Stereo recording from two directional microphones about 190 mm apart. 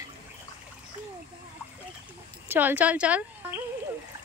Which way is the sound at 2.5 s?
10° right (ahead or behind).